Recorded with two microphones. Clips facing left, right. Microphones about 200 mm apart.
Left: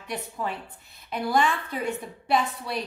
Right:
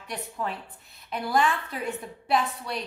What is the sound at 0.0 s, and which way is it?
A woman's voice, centre (ahead or behind).